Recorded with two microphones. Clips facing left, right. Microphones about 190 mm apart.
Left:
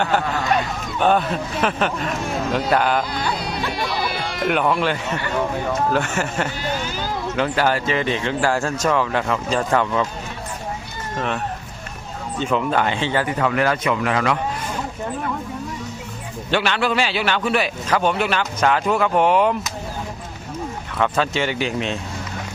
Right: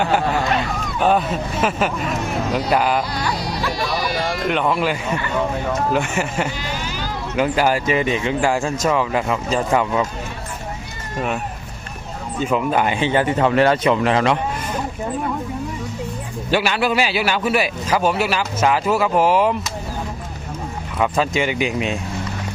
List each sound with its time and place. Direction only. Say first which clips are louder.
0.9 s speech: even; centre (ahead or behind)
4.4 s a man's voice: left 2 dB; centre (ahead or behind)
12.4 s speech: right 1 dB; 5° right (ahead or behind); by 14.3 s 25° right (ahead or behind)
16.5 s a man's voice: right 2 dB; 10° right (ahead or behind)
21.0 s a man's voice: right 1 dB; 10° right (ahead or behind)